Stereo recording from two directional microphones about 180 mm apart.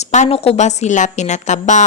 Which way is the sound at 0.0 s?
40° left (ahead or behind).